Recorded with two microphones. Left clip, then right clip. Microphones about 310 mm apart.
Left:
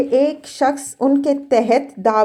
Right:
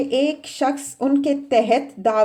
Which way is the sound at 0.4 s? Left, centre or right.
Centre.